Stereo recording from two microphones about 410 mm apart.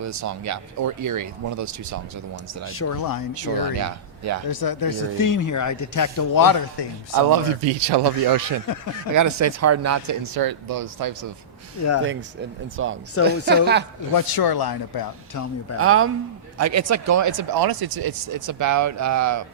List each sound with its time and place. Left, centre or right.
0.0 s speech: right
2.6 s speech: left
2.9 s speech: left
3.3 s speech: right
4.4 s speech: left
7.1 s speech: right
7.6 s speech: right
9.1 s speech: right
10.3 s speech: right
12.7 s a woman's voice: right
14.1 s speech: left
15.8 s speech: right